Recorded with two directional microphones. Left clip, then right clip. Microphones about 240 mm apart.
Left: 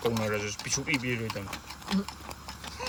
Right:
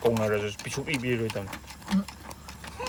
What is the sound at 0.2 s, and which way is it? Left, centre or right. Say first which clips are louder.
Speech: right 4 dB; centre.